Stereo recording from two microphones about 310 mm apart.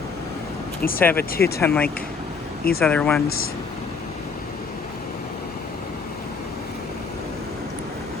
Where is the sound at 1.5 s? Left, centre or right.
Centre.